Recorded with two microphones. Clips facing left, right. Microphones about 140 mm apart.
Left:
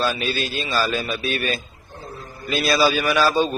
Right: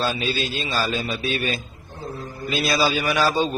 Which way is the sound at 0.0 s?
20° right (ahead or behind).